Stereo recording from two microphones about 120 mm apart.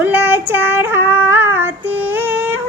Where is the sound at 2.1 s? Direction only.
15° right (ahead or behind).